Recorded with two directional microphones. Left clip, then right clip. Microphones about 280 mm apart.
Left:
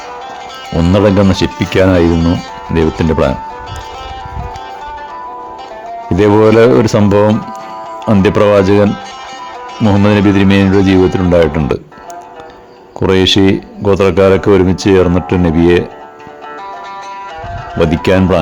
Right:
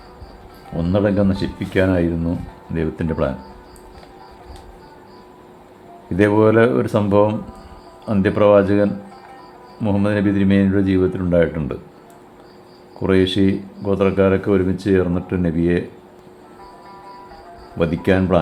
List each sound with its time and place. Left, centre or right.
0.7 s speech: left
6.1 s speech: left
13.0 s speech: left
17.7 s speech: left